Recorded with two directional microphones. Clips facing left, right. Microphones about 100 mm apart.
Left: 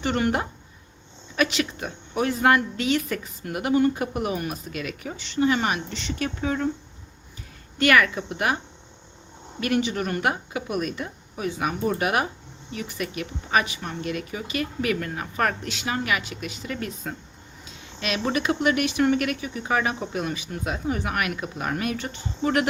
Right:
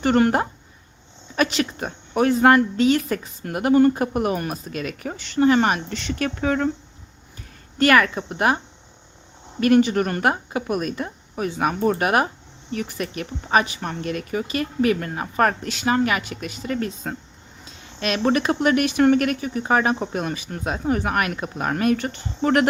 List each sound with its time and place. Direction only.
0.0 s a woman's voice: 45° right (ahead or behind); by 6.7 s 65° right (ahead or behind)
7.8 s speech: 40° right (ahead or behind)
9.6 s a woman's voice: 40° right (ahead or behind)